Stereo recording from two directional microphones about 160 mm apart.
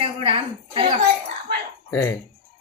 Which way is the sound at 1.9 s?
15° left (ahead or behind).